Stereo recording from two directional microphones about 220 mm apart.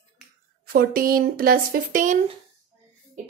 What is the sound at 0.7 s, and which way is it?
Speech, 40° right (ahead or behind).